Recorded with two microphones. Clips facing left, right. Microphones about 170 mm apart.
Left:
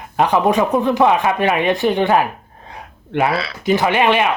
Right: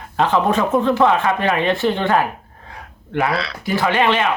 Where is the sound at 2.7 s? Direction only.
20° left (ahead or behind).